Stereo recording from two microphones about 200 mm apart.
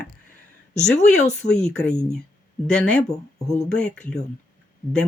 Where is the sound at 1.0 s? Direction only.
35° left (ahead or behind).